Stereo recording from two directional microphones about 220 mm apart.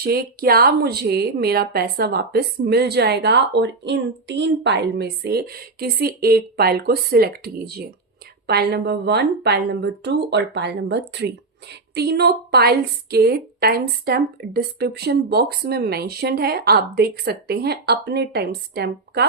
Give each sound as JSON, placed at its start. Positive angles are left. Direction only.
{"t": 0.0, "sound": "a woman's voice", "side_deg": -45}